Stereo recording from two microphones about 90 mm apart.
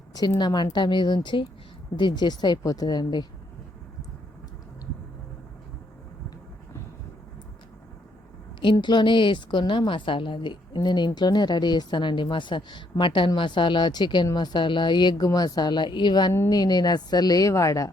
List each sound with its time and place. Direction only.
0.3 s a woman's voice: 55° left (ahead or behind)
8.7 s a woman's voice: 55° left (ahead or behind); by 17.9 s 40° left (ahead or behind)